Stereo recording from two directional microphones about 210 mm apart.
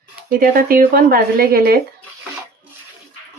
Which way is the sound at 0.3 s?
45° right (ahead or behind).